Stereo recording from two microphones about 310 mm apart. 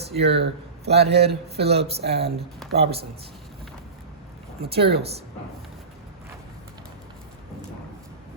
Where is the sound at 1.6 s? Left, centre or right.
Centre.